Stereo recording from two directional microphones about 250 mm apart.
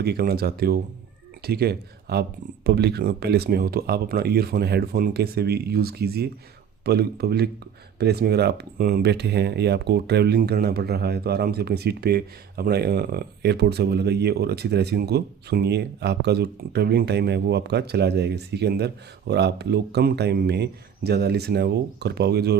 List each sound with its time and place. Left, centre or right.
0.0 s speech: right